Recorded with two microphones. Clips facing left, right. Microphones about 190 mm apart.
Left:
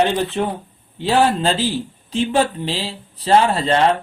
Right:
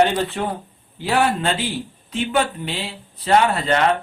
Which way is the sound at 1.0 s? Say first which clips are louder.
Left 3 dB; 25° left (ahead or behind).